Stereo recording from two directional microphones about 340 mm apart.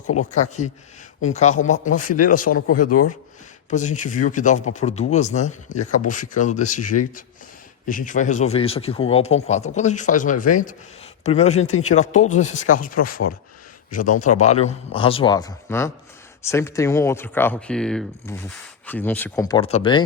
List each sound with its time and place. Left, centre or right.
0.3 s speech: left
3.7 s speech: left
7.9 s speech: left